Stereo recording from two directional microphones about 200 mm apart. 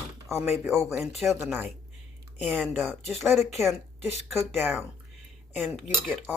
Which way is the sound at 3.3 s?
Centre (ahead or behind).